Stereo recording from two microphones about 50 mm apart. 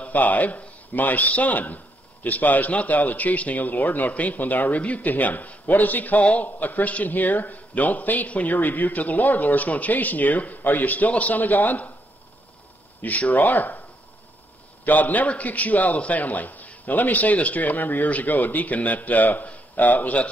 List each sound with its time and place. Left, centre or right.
0.0 s a man's voice: left
13.0 s a man's voice: left
14.9 s a man's voice: left